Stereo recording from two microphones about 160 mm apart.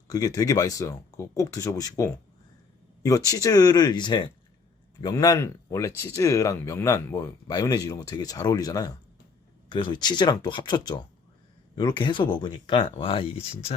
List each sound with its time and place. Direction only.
0.1 s speech: 25° left (ahead or behind)